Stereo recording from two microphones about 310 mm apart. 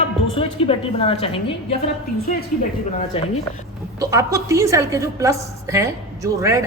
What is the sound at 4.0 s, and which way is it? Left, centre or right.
A woman's voice, centre.